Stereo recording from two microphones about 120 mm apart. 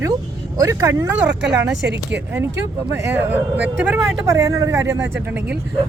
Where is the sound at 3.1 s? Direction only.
15° right (ahead or behind).